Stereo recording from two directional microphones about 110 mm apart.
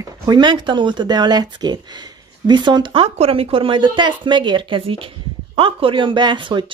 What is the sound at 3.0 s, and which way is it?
A woman's voice, 65° right (ahead or behind).